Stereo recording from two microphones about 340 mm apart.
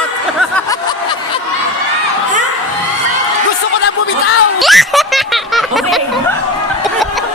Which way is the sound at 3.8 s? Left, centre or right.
Left.